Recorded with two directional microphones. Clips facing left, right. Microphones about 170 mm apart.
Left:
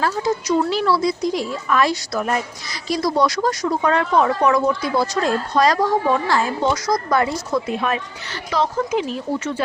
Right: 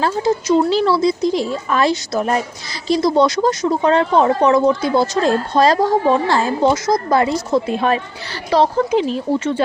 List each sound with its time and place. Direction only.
0.0 s speech: 25° right (ahead or behind)